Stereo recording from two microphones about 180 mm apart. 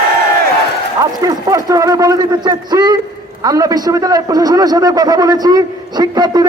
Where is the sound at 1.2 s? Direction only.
20° right (ahead or behind).